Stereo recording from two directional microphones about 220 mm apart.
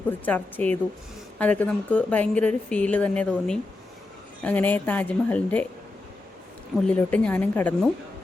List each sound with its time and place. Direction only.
0.3 s speech: 5° left (ahead or behind)
6.8 s speech: 5° left (ahead or behind)